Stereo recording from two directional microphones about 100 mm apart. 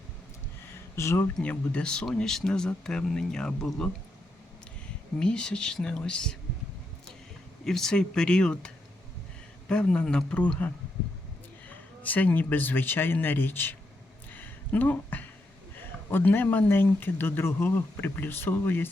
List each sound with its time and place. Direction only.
0.9 s speech: 30° left (ahead or behind)
1.4 s speech: 10° left (ahead or behind)
5.2 s speech: 10° left (ahead or behind)
7.6 s speech: 5° left (ahead or behind)
11.7 s speech: 15° left (ahead or behind)
14.3 s a sound: 20° left (ahead or behind)
15.7 s speech: 20° left (ahead or behind)